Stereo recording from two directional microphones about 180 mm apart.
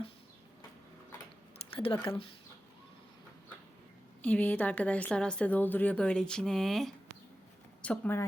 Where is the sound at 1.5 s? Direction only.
30° left (ahead or behind).